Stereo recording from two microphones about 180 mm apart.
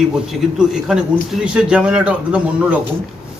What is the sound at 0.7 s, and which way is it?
A man's voice, 5° right (ahead or behind).